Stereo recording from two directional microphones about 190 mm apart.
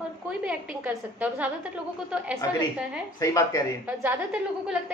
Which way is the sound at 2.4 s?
15° left (ahead or behind).